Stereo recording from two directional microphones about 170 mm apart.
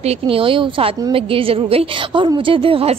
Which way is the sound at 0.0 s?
30° right (ahead or behind).